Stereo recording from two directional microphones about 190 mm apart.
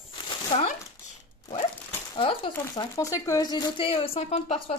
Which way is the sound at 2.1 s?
25° left (ahead or behind).